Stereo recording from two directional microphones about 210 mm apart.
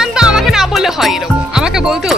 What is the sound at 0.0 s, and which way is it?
Music, 5° right (ahead or behind).